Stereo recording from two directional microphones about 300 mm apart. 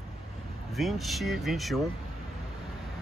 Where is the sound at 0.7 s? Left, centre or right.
Centre.